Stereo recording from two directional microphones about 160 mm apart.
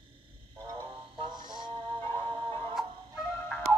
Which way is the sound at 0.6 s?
25° right (ahead or behind).